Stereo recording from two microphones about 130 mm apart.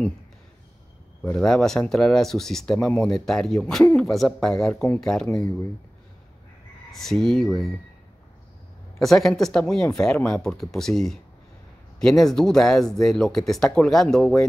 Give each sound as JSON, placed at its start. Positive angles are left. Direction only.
{"t": 1.2, "sound": "speech", "side_deg": 5}
{"t": 5.3, "sound": "speech", "side_deg": 30}
{"t": 6.9, "sound": "speech", "side_deg": 0}
{"t": 9.0, "sound": "speech", "side_deg": 5}